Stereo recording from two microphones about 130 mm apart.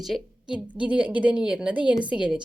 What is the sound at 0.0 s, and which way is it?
A woman's voice, centre (ahead or behind).